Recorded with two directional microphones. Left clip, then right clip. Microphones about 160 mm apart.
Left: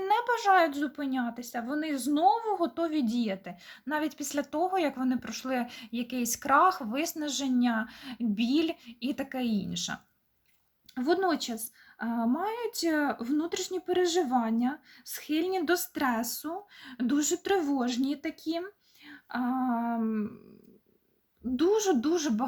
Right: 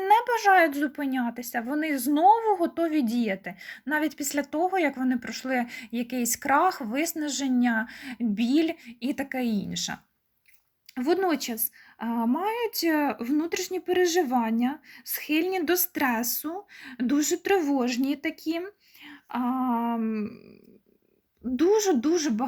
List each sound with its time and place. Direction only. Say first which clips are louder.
0.0 s speech: right 6 dB; 20° right (ahead or behind)
21.5 s speech: right 4 dB; 20° right (ahead or behind)